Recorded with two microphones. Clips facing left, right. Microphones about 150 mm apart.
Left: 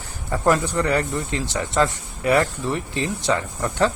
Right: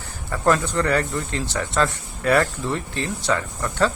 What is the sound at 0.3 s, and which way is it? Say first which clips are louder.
Speech: left 1 dB; 15° left (ahead or behind).